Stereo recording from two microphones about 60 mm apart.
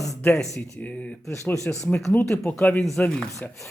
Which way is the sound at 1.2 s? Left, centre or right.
Left.